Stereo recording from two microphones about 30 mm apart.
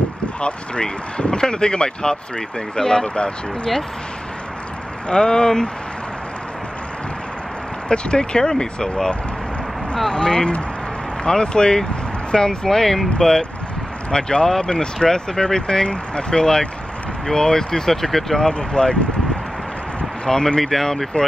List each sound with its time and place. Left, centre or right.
0.4 s speech: left
1.3 s speech: left
5.1 s speech: left
7.9 s speech: left
10.1 s speech: left; by 13.4 s centre
14.1 s speech: left; by 18.5 s centre
18.7 s speech: left
20.2 s speech: left
20.6 s speech: centre